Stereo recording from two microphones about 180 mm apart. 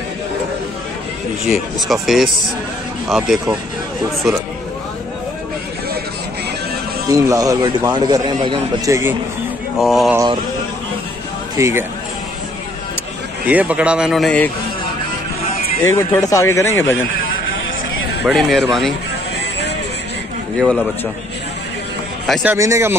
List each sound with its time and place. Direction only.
1.5 s a man's voice: centre (ahead or behind)
7.1 s speech: 20° right (ahead or behind)
9.8 s a man's voice: centre (ahead or behind)
11.5 s speech: 15° right (ahead or behind)
13.5 s a man's voice: 10° right (ahead or behind)
15.8 s speech: 15° left (ahead or behind)
18.2 s a man's voice: centre (ahead or behind)
22.2 s a man's voice: centre (ahead or behind)
22.5 s speech: 15° right (ahead or behind)